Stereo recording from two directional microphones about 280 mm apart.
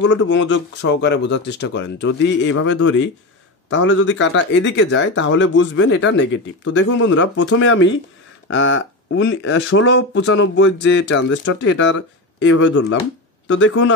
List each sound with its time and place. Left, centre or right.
0.1 s speech: left